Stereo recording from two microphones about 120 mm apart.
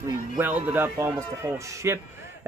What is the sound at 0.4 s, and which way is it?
Speech, 15° right (ahead or behind).